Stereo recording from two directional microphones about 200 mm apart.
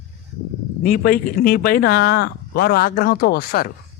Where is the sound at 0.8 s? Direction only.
45° left (ahead or behind).